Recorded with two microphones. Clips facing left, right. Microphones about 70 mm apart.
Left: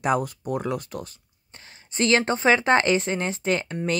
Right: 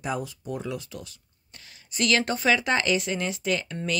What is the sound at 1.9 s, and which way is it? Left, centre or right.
Speech, left.